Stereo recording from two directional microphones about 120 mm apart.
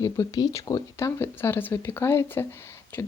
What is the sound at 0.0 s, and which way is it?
Speech, 25° left (ahead or behind).